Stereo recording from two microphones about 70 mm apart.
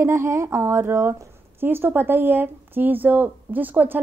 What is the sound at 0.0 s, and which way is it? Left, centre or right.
Speech, right.